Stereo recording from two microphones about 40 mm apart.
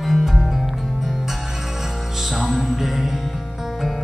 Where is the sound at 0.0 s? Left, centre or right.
Centre.